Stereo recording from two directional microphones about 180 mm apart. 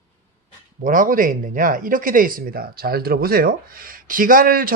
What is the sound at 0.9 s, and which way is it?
A man's voice, 50° right (ahead or behind).